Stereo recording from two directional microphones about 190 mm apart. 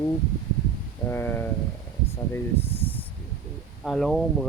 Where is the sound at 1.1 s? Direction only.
10° left (ahead or behind).